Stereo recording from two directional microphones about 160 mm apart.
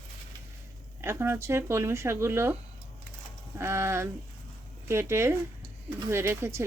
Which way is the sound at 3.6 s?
15° right (ahead or behind).